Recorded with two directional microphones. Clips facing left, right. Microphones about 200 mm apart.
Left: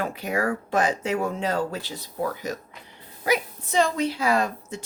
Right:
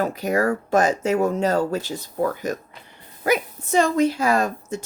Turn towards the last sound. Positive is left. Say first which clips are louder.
# right 3 dB
turn(degrees=-45)  # may be behind; listen again after turning